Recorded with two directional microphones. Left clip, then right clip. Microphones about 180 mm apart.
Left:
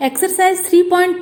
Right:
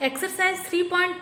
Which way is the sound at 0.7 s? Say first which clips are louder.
Left 13 dB; 35° left (ahead or behind).